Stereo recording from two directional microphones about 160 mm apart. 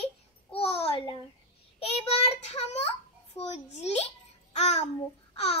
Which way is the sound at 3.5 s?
40° left (ahead or behind).